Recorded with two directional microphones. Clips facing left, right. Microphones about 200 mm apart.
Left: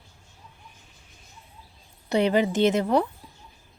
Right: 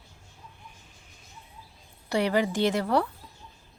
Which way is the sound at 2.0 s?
20° left (ahead or behind).